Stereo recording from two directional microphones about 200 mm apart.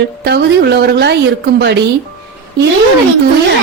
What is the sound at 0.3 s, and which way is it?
A woman's voice, 55° right (ahead or behind).